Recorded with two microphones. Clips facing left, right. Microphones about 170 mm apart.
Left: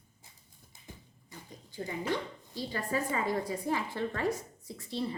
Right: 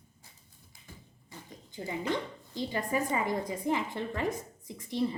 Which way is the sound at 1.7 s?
20° right (ahead or behind).